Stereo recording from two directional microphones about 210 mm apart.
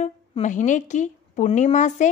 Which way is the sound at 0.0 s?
35° left (ahead or behind).